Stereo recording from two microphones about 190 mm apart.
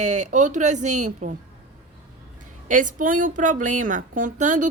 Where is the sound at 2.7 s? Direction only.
45° right (ahead or behind).